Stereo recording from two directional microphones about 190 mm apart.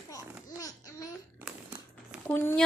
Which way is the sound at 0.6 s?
20° left (ahead or behind).